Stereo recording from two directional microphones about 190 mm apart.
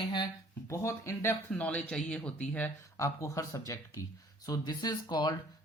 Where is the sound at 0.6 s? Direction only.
15° left (ahead or behind).